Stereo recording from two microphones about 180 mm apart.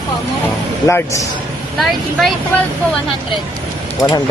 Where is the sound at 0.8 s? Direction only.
15° left (ahead or behind).